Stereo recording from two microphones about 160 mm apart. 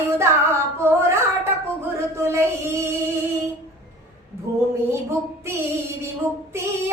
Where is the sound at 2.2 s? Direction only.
15° right (ahead or behind).